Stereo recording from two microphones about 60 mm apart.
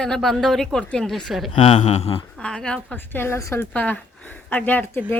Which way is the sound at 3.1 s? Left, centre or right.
Left.